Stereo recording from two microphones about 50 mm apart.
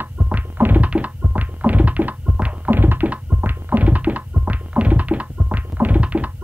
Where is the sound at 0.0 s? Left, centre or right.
Right.